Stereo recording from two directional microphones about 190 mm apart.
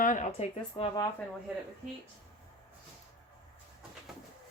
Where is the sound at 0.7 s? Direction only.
25° left (ahead or behind).